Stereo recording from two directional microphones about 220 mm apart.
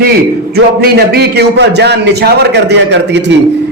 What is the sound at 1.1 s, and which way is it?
A man's voice, 45° right (ahead or behind).